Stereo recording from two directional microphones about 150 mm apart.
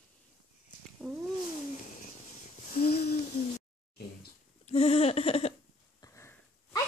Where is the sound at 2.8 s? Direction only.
90° left.